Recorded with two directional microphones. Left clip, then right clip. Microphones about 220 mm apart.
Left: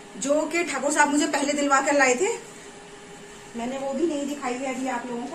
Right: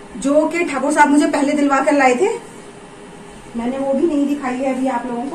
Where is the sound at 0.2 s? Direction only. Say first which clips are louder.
Right 8 dB; 5° left (ahead or behind).